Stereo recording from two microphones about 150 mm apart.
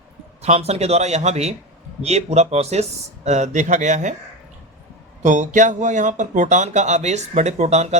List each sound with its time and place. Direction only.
0.4 s speech: 45° right (ahead or behind)
5.2 s speech: 55° right (ahead or behind)